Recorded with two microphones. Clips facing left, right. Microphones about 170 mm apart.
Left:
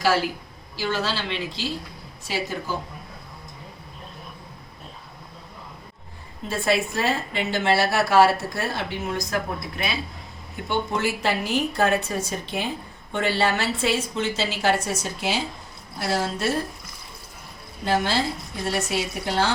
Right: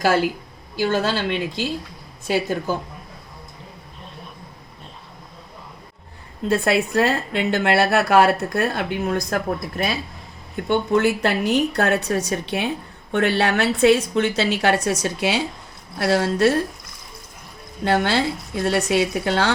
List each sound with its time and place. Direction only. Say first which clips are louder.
0.8 s speech: right 6 dB; 50° right (ahead or behind)
6.5 s a woman's voice: right 4 dB; 65° right (ahead or behind); by 9.9 s 45° right (ahead or behind)
10.7 s a woman's voice: right 7 dB; 60° right (ahead or behind)
17.8 s a woman's voice: right 4 dB; 65° right (ahead or behind)